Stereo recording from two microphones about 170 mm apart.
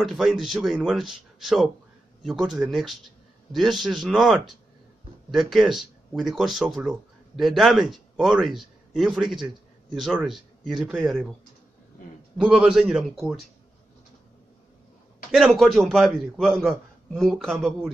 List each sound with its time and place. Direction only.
0.0 s a man's voice: centre (ahead or behind)
12.4 s a man's voice: 5° right (ahead or behind)
15.3 s a man's voice: centre (ahead or behind)